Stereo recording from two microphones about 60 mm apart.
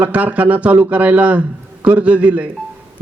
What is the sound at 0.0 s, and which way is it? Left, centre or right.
A man's voice, right.